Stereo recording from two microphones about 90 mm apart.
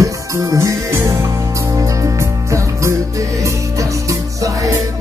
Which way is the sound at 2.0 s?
35° right (ahead or behind).